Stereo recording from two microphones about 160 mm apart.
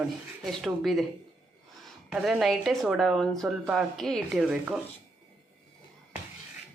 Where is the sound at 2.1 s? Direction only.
Centre (ahead or behind).